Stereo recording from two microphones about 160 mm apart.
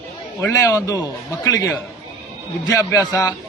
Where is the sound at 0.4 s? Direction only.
20° left (ahead or behind).